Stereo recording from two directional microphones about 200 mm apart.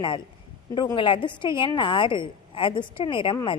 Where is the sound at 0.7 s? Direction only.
25° left (ahead or behind).